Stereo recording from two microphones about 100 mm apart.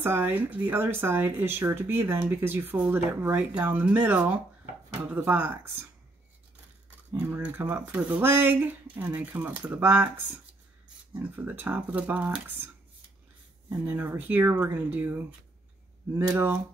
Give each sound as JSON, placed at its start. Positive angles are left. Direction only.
{"t": 0.0, "sound": "speech", "side_deg": -20}
{"t": 7.1, "sound": "speech", "side_deg": -20}
{"t": 16.3, "sound": "speech", "side_deg": -20}